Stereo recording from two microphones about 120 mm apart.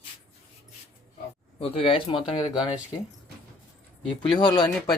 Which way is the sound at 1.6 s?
55° left (ahead or behind).